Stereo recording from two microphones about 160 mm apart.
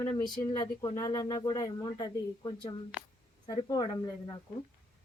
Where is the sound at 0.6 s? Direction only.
25° left (ahead or behind).